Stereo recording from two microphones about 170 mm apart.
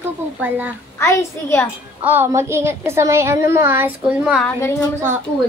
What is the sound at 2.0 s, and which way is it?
A woman's voice, 10° right (ahead or behind).